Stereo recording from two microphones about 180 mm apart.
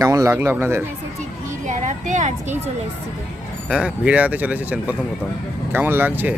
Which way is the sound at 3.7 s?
5° right (ahead or behind).